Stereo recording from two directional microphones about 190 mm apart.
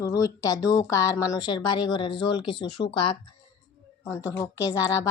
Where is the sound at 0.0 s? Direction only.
15° left (ahead or behind).